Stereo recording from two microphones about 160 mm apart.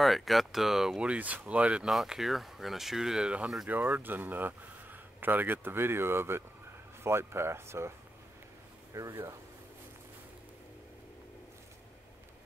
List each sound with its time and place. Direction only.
0.0 s speech: centre (ahead or behind); by 7.9 s 15° right (ahead or behind)
8.9 s speech: 15° right (ahead or behind)